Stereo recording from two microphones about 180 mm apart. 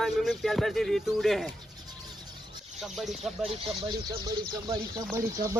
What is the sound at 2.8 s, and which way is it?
Speech, centre (ahead or behind).